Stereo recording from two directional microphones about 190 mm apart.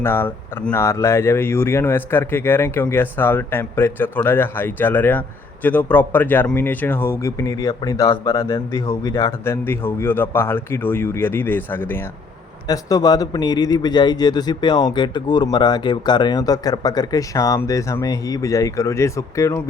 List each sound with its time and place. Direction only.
0.0 s a man's voice: 10° left (ahead or behind)